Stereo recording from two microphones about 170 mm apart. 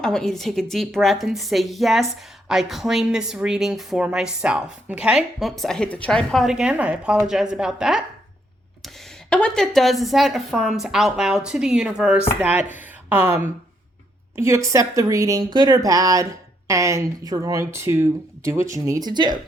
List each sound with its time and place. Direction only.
0.0 s speech: 5° left (ahead or behind)
9.3 s speech: 5° left (ahead or behind); by 19.4 s 25° right (ahead or behind)